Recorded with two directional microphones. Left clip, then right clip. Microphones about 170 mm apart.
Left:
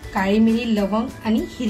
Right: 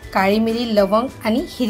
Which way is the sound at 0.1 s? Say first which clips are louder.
Right 3 dB; 45° right (ahead or behind).